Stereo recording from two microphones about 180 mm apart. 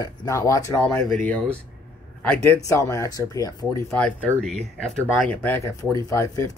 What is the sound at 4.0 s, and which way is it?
Speech, 5° left (ahead or behind).